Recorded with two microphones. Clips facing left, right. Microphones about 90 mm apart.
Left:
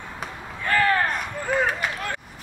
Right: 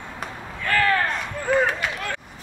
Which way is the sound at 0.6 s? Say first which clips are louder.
Even; 20° left (ahead or behind).